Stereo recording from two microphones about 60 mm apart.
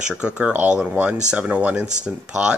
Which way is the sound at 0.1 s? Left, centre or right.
Centre.